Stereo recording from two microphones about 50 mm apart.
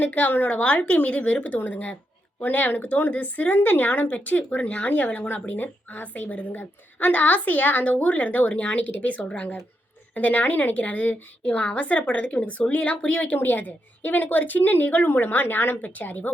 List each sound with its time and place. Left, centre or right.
0.0 s a woman's voice: left
13.3 s speech: left